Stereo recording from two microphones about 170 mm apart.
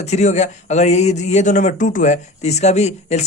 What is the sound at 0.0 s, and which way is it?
Speech, 40° left (ahead or behind).